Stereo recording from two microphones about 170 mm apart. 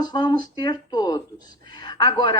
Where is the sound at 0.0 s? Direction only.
25° left (ahead or behind).